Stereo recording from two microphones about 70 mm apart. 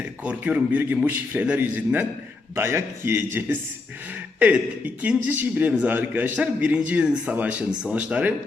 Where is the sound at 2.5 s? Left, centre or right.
Right.